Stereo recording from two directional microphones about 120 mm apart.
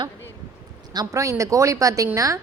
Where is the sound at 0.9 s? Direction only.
25° right (ahead or behind).